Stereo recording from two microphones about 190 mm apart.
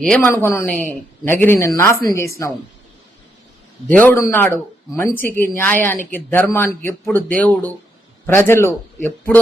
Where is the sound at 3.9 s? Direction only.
10° left (ahead or behind).